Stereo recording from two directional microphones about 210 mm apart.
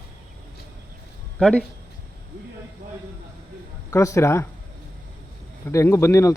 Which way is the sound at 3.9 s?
15° left (ahead or behind).